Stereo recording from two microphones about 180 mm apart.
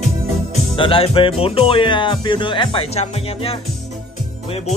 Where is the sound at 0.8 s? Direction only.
30° left (ahead or behind).